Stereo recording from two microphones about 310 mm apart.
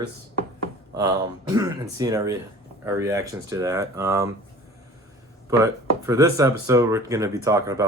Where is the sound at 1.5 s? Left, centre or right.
Centre.